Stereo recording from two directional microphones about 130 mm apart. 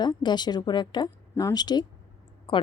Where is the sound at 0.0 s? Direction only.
35° left (ahead or behind).